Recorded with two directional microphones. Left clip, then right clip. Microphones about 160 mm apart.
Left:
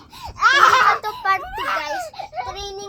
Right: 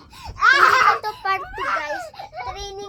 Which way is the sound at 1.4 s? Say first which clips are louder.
Left 1 dB; 30° left (ahead or behind).